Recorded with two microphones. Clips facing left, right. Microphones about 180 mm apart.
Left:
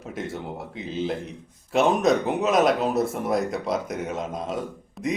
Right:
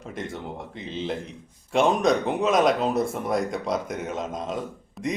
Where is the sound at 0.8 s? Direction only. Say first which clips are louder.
Left 3 dB; centre (ahead or behind).